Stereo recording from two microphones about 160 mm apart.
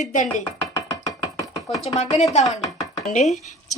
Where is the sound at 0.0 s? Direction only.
50° left (ahead or behind).